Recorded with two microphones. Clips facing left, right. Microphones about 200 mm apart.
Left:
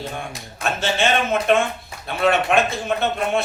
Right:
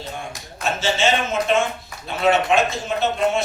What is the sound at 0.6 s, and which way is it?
A man's voice, 60° left (ahead or behind).